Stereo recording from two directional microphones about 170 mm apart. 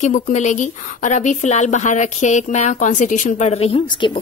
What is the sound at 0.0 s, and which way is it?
A woman's voice, 45° left (ahead or behind).